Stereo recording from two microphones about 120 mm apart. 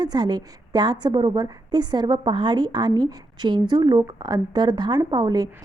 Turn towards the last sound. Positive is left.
turn(degrees=-35)  # may be behind; listen again after turning